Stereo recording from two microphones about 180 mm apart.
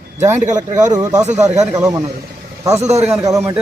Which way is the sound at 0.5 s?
15° right (ahead or behind).